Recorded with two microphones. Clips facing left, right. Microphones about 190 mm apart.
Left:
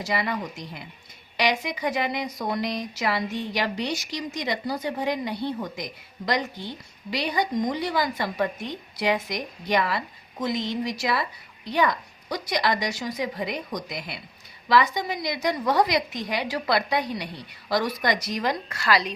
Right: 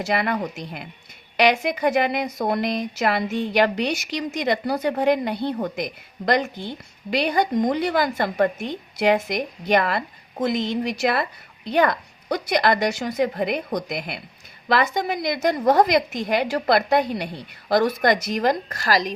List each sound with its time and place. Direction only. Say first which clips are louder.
0.0 s a woman's voice: right 4 dB; 55° right (ahead or behind); by 19.0 s 40° right (ahead or behind)